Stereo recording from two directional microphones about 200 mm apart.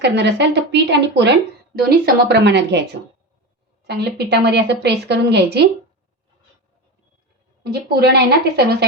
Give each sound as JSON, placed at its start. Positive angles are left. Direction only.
{"t": 0.0, "sound": "a woman's voice", "side_deg": -60}
{"t": 3.8, "sound": "a woman's voice", "side_deg": -55}
{"t": 7.6, "sound": "a woman's voice", "side_deg": -50}